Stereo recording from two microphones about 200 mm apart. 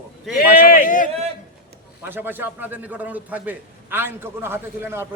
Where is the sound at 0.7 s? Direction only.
40° left (ahead or behind).